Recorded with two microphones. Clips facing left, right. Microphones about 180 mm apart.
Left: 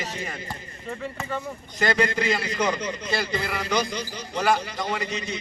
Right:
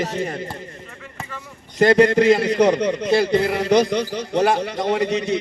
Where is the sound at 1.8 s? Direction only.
70° right (ahead or behind).